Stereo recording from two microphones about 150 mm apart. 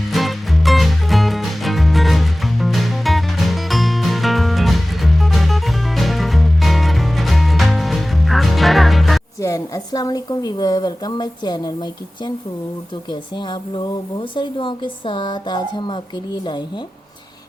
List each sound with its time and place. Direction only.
0.1 s music: centre (ahead or behind)
9.4 s a woman's voice: 20° left (ahead or behind)